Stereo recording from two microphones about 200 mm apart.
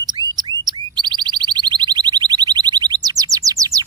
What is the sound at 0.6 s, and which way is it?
Alarm, 20° right (ahead or behind).